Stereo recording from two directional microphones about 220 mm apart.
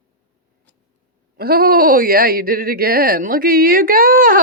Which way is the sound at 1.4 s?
45° right (ahead or behind).